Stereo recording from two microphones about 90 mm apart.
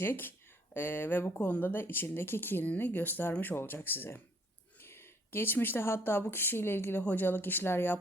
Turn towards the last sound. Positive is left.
turn(degrees=25)  # may be behind; listen again after turning